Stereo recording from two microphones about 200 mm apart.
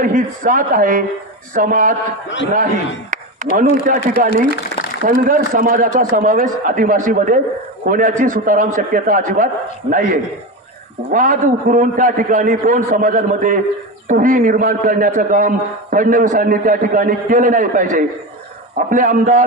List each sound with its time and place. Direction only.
0.0 s a man's voice: 40° right (ahead or behind)
3.1 s a man's voice: 40° right (ahead or behind)